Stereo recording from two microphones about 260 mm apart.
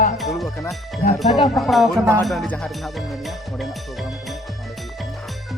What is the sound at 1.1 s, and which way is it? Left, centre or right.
Speech, centre.